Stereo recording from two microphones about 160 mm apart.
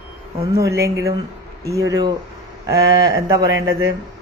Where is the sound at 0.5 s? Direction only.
20° right (ahead or behind).